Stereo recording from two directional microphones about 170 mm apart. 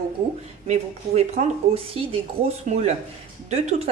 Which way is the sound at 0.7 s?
40° right (ahead or behind).